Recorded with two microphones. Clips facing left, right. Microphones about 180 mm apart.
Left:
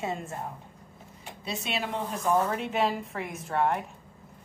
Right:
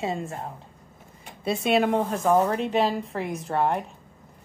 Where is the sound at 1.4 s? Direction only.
55° right (ahead or behind).